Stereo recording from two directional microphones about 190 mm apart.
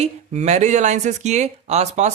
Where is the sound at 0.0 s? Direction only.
35° right (ahead or behind).